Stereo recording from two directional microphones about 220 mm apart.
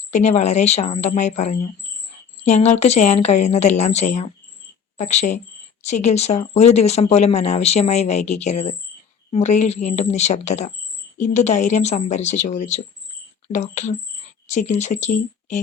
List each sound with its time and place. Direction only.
0.1 s speech: 30° left (ahead or behind)